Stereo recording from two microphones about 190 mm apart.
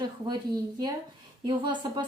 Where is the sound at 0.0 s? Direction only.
20° right (ahead or behind).